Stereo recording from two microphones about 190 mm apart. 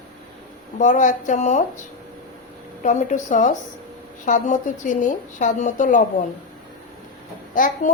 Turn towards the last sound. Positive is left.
turn(degrees=45)  # may be behind; listen again after turning